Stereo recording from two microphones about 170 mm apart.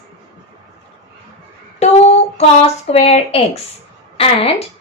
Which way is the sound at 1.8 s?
40° left (ahead or behind).